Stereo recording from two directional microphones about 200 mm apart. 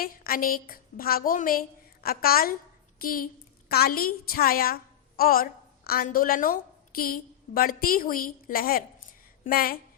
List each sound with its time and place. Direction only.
0.0 s a woman's voice: 45° left (ahead or behind)